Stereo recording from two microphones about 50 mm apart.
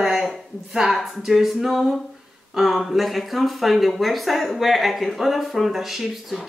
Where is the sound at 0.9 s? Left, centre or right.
Centre.